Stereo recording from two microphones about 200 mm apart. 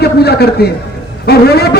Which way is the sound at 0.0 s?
55° left (ahead or behind).